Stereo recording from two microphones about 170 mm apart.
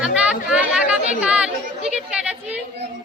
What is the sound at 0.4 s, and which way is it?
Chatter, 5° right (ahead or behind).